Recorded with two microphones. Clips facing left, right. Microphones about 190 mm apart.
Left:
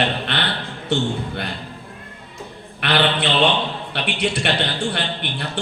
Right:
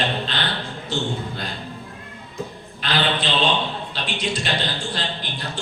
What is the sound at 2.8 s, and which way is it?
A man's voice, 65° left (ahead or behind).